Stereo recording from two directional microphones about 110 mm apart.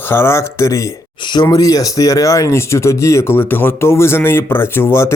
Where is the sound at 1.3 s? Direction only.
40° left (ahead or behind).